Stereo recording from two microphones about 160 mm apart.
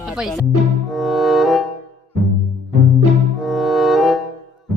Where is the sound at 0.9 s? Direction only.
Centre (ahead or behind).